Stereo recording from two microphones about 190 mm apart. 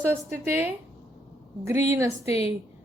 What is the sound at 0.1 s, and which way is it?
Speech, 10° right (ahead or behind).